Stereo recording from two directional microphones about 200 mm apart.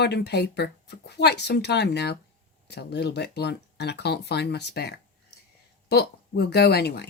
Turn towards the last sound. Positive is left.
turn(degrees=55)  # may be behind; listen again after turning